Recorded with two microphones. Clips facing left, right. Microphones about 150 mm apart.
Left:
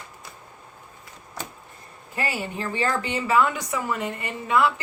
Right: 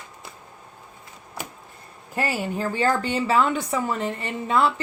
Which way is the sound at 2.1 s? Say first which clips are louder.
Right 3 dB; 40° right (ahead or behind).